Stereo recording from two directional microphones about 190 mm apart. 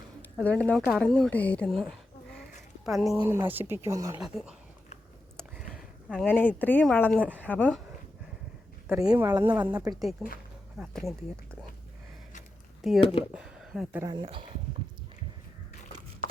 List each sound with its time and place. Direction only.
0.2 s speech: 10° left (ahead or behind)
3.2 s speech: 10° right (ahead or behind)
4.2 s speech: 5° right (ahead or behind)
5.4 s a sound: centre (ahead or behind)
7.3 s speech: 10° left (ahead or behind)
9.2 s speech: 20° right (ahead or behind); by 11.1 s centre (ahead or behind)
12.8 s speech: centre (ahead or behind)
14.0 s speech: 20° right (ahead or behind)